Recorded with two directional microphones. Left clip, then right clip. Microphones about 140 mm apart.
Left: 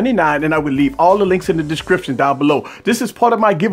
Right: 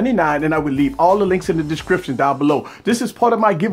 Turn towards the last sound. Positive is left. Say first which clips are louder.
# left 2 dB
turn(degrees=35)  # may be behind; listen again after turning